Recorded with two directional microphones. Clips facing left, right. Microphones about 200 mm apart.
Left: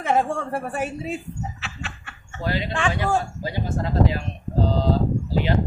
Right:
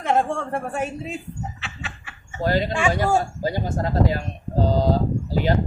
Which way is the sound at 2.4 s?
45° right (ahead or behind).